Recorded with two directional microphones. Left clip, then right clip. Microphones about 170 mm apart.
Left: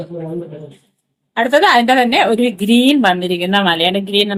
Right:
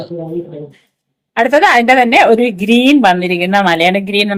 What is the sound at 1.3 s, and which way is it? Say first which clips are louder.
Speech: right 2 dB; 20° right (ahead or behind).